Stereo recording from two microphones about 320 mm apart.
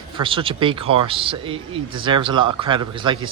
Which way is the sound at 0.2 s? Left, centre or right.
Centre.